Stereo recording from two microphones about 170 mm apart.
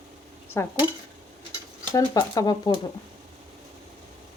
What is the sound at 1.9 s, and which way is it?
Speech, 20° left (ahead or behind).